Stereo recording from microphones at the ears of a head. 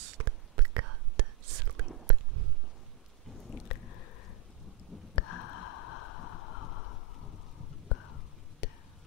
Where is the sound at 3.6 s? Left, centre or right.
Left.